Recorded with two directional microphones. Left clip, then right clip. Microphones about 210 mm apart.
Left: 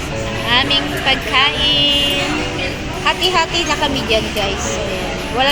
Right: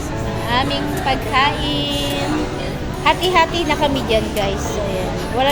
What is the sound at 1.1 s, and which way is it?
Speech, 10° right (ahead or behind).